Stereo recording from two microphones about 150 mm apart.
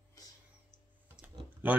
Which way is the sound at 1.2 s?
5° right (ahead or behind).